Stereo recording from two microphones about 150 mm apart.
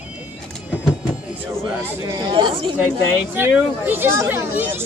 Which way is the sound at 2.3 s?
35° right (ahead or behind).